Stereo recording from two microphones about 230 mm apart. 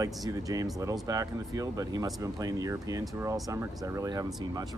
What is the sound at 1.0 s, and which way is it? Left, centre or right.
Speech, centre.